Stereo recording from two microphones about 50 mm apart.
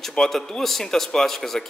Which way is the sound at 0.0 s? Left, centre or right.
Centre.